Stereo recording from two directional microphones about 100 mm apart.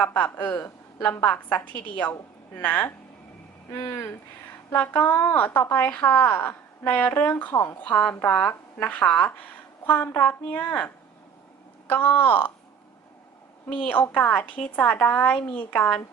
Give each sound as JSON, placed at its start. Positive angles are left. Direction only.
{"t": 0.0, "sound": "a woman's voice", "side_deg": 15}
{"t": 7.8, "sound": "a woman's voice", "side_deg": 10}
{"t": 13.7, "sound": "a woman's voice", "side_deg": 15}